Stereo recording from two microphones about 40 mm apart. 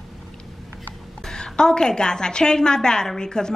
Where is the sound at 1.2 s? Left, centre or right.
Centre.